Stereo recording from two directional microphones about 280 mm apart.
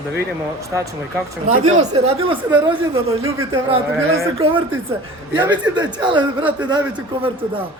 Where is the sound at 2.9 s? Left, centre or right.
Right.